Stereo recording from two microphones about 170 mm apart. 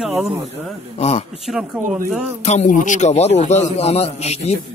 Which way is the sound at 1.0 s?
40° left (ahead or behind).